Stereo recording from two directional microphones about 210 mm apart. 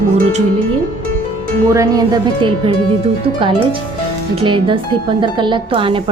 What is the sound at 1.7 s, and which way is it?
Speech, 15° right (ahead or behind).